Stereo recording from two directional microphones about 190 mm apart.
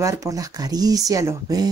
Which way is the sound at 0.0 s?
15° right (ahead or behind).